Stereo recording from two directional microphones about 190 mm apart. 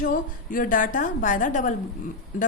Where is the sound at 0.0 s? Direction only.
45° left (ahead or behind).